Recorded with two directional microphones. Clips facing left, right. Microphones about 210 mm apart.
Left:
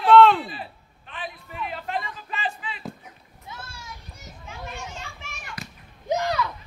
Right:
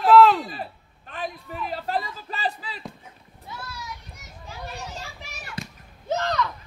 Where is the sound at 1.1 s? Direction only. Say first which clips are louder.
Right 4 dB; 40° right (ahead or behind).